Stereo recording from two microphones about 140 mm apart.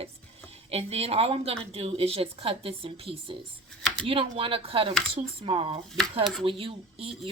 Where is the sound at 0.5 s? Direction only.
50° right (ahead or behind).